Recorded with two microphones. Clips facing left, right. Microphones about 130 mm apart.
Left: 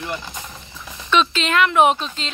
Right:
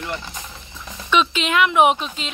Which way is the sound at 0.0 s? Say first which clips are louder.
Left 1 dB; 15° left (ahead or behind).